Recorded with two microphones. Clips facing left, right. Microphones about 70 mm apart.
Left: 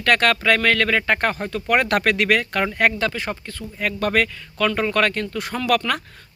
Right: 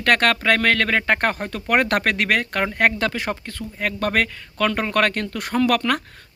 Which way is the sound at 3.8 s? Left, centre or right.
Right.